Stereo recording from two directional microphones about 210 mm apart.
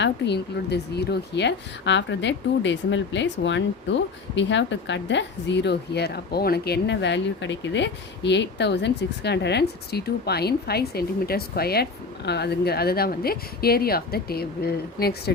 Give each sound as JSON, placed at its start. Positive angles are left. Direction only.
{"t": 0.0, "sound": "a woman's voice", "side_deg": 55}